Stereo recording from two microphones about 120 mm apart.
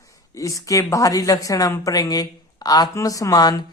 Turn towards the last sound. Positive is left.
turn(degrees=35)  # may be behind; listen again after turning